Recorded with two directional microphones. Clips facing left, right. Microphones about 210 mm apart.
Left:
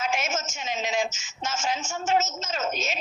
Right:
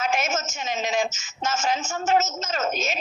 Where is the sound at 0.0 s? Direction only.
45° right (ahead or behind).